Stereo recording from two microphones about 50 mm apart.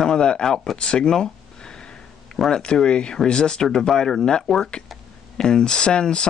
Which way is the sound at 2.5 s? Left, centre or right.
Centre.